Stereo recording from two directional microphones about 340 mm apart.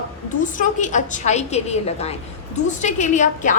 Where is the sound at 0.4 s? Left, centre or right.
Left.